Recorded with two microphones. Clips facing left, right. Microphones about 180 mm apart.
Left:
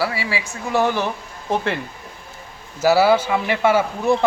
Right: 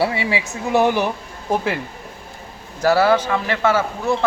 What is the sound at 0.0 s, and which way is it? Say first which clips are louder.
A woman's voice: right 3 dB; 25° right (ahead or behind).